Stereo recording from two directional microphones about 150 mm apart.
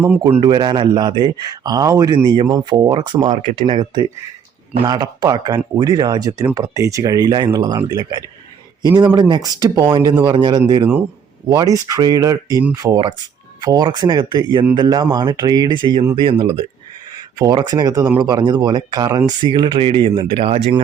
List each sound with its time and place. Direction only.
0.4 s speech: 30° right (ahead or behind)
3.2 s speech: 45° right (ahead or behind)
4.9 s speech: 25° right (ahead or behind)